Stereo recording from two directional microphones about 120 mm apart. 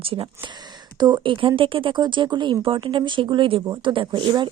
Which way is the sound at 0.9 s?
35° right (ahead or behind).